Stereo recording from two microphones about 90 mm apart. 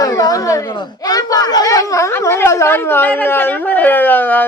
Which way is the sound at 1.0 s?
45° left (ahead or behind).